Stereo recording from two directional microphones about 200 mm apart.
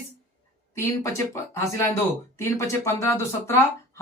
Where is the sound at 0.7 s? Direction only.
15° left (ahead or behind).